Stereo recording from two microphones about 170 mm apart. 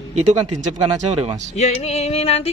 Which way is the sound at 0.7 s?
20° right (ahead or behind).